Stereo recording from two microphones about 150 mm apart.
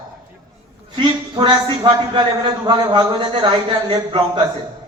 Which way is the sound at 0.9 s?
30° right (ahead or behind).